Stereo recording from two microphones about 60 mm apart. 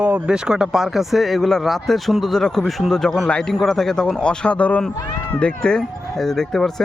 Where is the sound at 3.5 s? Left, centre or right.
Centre.